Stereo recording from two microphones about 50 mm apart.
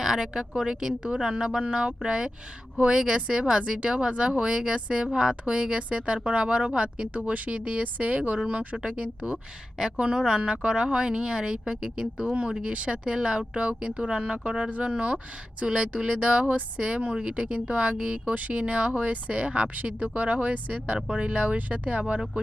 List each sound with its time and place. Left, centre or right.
0.0 s speech: centre